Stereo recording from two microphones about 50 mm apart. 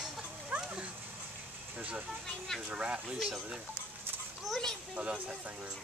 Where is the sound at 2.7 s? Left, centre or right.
Right.